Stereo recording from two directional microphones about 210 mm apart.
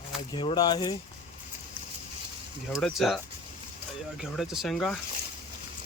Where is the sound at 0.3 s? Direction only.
20° left (ahead or behind).